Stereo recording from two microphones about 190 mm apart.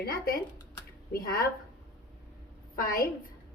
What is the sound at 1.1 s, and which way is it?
Speech, 55° left (ahead or behind).